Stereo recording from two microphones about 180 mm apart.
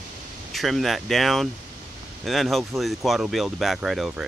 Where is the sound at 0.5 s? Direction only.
Centre (ahead or behind).